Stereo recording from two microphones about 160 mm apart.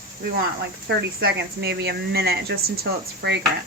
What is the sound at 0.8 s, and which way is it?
Speech, 90° right.